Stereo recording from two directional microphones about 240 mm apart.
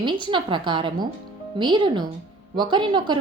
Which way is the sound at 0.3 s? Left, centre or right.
Right.